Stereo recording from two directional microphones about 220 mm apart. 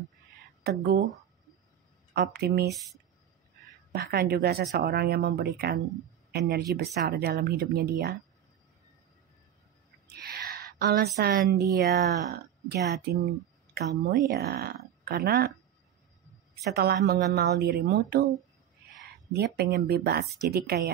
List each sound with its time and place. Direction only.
0.7 s speech: 45° right (ahead or behind)
2.1 s speech: 45° right (ahead or behind)
3.9 s speech: 45° right (ahead or behind)
10.2 s a sound: 45° right (ahead or behind)
11.1 s speech: 45° right (ahead or behind)
16.7 s speech: 45° right (ahead or behind)
19.3 s speech: 45° right (ahead or behind)